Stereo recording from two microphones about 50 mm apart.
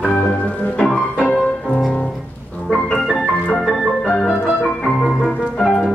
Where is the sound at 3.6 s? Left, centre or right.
Centre.